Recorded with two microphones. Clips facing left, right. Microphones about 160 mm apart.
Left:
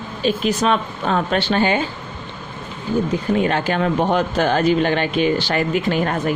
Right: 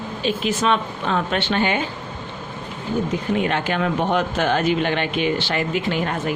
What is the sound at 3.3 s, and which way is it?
Speech, 35° left (ahead or behind).